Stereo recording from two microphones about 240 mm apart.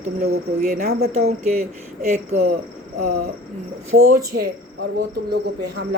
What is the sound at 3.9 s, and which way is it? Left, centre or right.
Speech, right.